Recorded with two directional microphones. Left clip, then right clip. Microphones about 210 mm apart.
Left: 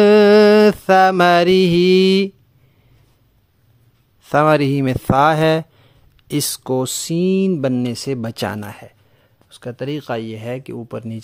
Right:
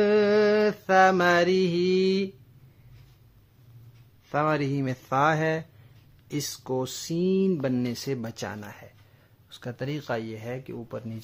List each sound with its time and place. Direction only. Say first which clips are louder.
0.0 s mantra: left 11 dB; 50° left (ahead or behind)
4.3 s speech: left 12 dB; 50° left (ahead or behind)
9.5 s speech: left 9 dB; 30° left (ahead or behind)